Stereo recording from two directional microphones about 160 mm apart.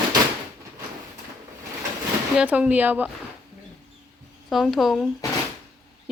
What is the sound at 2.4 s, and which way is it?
Speech, 10° right (ahead or behind).